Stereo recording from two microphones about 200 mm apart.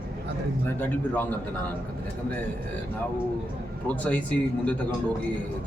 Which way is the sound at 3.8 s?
5° left (ahead or behind).